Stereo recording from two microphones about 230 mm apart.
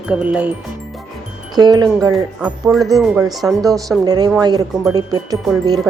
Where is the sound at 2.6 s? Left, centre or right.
Centre.